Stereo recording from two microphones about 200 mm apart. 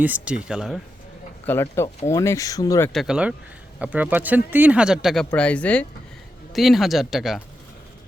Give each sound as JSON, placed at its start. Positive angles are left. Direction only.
{"t": 0.0, "sound": "speech", "side_deg": -5}
{"t": 1.5, "sound": "speech", "side_deg": 10}
{"t": 2.9, "sound": "speech", "side_deg": 0}